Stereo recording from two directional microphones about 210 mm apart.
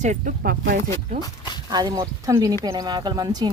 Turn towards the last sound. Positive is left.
turn(degrees=-20)  # may be behind; listen again after turning